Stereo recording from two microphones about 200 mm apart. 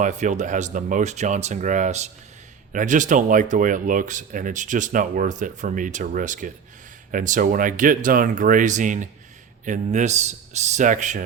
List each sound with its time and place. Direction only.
0.0 s speech: 35° right (ahead or behind)